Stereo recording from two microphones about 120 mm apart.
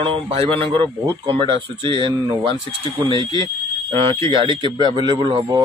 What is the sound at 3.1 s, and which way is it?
Speech, 45° right (ahead or behind).